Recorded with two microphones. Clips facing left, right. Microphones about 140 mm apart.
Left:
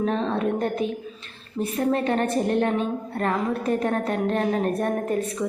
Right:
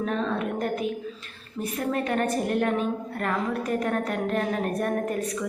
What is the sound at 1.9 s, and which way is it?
A woman's voice, 30° left (ahead or behind).